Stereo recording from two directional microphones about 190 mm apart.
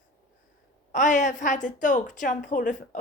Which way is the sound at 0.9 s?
40° left (ahead or behind).